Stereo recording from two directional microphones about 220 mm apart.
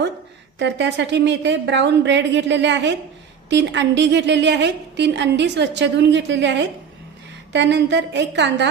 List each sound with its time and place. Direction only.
0.6 s a woman's voice: 55° right (ahead or behind)